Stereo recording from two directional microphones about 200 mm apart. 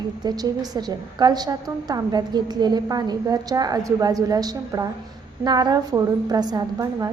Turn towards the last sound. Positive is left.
turn(degrees=-20)  # may be behind; listen again after turning